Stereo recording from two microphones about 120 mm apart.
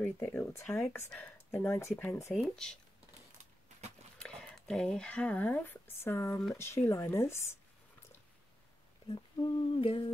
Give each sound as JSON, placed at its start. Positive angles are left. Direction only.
{"t": 0.0, "sound": "speech", "side_deg": 15}
{"t": 0.7, "sound": "speech", "side_deg": 5}
{"t": 2.5, "sound": "speech", "side_deg": 5}
{"t": 4.2, "sound": "speech", "side_deg": 5}
{"t": 9.1, "sound": "humming", "side_deg": 45}